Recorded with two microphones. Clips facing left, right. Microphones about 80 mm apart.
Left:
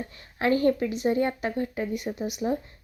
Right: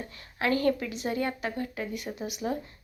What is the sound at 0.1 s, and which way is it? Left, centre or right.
A woman's voice, left.